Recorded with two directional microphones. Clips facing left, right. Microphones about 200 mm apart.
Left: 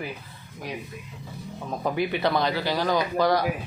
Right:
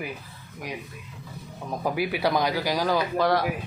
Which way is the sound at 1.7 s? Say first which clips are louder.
Left 1 dB; 10° right (ahead or behind).